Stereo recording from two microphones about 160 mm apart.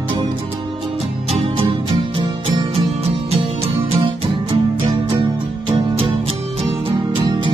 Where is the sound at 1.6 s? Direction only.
30° right (ahead or behind).